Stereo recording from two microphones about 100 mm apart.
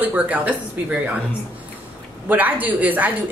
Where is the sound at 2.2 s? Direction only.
15° right (ahead or behind).